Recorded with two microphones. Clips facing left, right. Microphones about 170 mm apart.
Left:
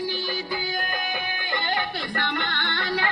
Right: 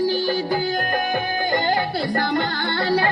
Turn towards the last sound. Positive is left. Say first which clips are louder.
# right 7 dB
turn(degrees=-35)  # may be behind; listen again after turning